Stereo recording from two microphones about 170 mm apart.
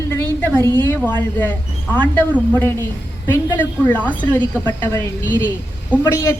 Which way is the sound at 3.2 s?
15° left (ahead or behind).